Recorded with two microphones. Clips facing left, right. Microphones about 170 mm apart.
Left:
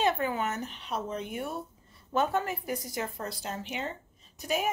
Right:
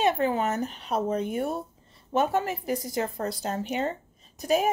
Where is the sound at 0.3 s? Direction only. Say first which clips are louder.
Right 5 dB; 40° right (ahead or behind).